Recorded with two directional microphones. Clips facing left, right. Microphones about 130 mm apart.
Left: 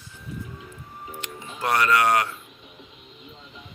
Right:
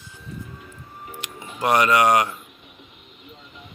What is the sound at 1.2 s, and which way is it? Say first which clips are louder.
Speech: right 4 dB; 15° right (ahead or behind).